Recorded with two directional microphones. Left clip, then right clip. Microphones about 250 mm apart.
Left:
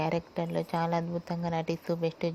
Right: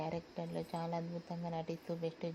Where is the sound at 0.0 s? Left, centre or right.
Left.